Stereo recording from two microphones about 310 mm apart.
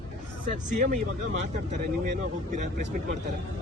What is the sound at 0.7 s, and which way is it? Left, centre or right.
Speech, right.